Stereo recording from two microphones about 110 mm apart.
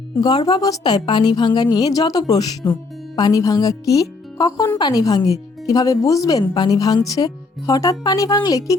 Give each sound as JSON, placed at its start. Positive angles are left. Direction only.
{"t": 0.2, "sound": "speech", "side_deg": 40}